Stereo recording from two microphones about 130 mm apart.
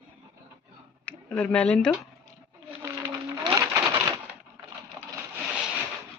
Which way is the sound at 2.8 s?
20° right (ahead or behind).